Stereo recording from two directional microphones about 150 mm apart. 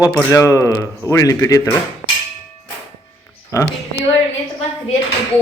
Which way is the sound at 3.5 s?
20° left (ahead or behind).